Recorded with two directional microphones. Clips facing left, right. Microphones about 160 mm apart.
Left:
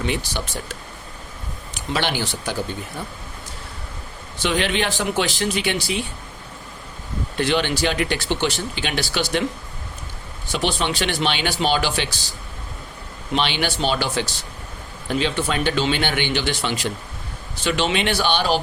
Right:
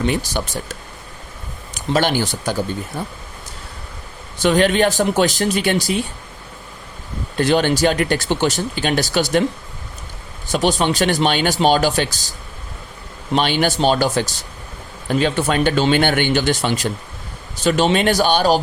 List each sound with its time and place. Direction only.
0.1 s speech: 45° right (ahead or behind)
1.7 s speech: 45° right (ahead or behind)
4.4 s speech: 45° right (ahead or behind)
7.3 s speech: 45° right (ahead or behind)
10.5 s speech: 45° right (ahead or behind)
13.3 s speech: 45° right (ahead or behind)